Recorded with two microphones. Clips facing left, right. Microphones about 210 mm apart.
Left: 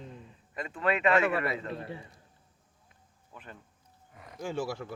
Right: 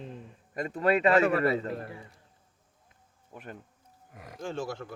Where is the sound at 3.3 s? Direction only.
50° right (ahead or behind).